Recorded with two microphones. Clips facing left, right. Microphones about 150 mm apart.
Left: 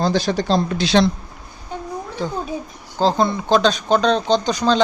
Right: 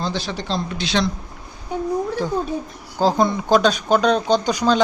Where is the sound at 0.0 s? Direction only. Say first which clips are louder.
Left 7 dB; 40° left (ahead or behind).